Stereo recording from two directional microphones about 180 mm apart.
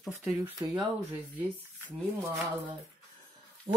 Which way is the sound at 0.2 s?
20° right (ahead or behind).